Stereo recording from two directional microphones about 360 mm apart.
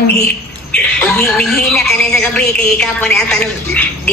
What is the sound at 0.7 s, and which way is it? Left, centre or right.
Speech, centre.